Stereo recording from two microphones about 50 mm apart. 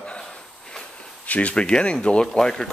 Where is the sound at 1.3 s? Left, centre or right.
Left; by 2.7 s centre.